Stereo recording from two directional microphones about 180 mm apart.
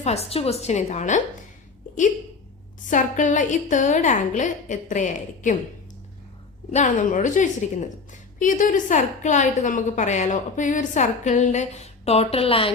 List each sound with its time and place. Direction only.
0.0 s a woman's voice: 35° left (ahead or behind)
2.8 s a woman's voice: 45° left (ahead or behind)
6.7 s a woman's voice: 40° left (ahead or behind)